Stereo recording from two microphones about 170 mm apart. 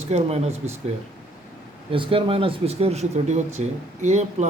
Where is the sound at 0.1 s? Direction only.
40° right (ahead or behind).